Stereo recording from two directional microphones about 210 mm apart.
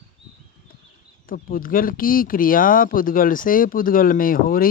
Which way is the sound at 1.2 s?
45° left (ahead or behind).